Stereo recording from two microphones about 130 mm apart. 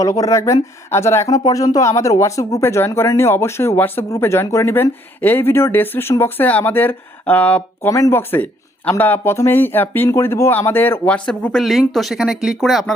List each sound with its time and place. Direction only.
0.0 s speech: 25° left (ahead or behind); by 12.8 s centre (ahead or behind)